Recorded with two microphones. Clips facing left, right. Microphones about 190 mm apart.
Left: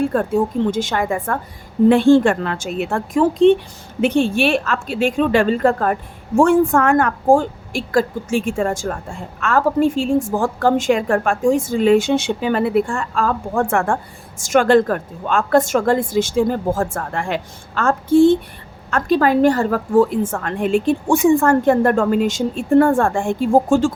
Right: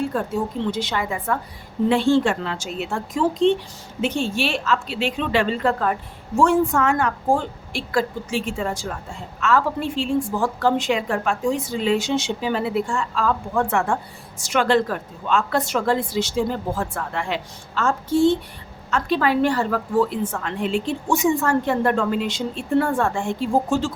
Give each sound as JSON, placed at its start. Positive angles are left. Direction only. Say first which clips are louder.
{"t": 0.0, "sound": "a woman's voice", "louder": "left 6 dB", "side_deg": 55}